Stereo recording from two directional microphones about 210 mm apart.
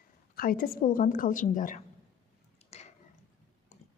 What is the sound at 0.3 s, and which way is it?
A woman's voice, 45° left (ahead or behind).